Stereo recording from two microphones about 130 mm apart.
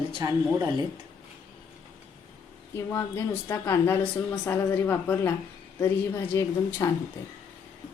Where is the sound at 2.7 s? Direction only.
20° left (ahead or behind).